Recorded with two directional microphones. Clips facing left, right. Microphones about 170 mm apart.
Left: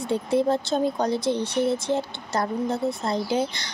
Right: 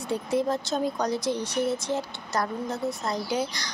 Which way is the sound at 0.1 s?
30° left (ahead or behind).